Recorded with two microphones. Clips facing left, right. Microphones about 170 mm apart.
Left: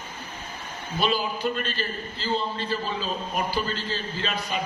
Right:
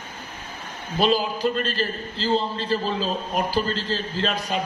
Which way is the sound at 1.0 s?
40° right (ahead or behind).